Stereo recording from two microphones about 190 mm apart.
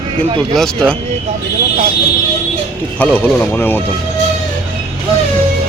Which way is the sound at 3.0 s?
10° left (ahead or behind).